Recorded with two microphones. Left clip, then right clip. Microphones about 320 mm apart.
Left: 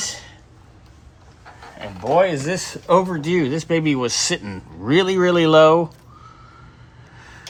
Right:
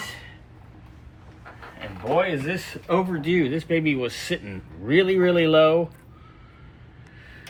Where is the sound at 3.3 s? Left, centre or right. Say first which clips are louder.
Right 1 dB; left.